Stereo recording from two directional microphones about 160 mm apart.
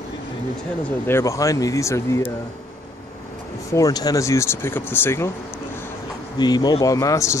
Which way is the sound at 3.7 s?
25° left (ahead or behind).